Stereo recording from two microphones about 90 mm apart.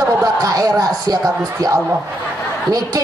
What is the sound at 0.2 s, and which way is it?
Speech, 40° right (ahead or behind).